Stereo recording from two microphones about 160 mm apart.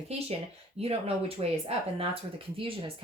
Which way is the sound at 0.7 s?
40° right (ahead or behind).